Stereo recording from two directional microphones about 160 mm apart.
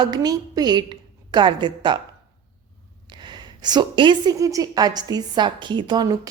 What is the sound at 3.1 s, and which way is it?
A woman's voice, 25° right (ahead or behind).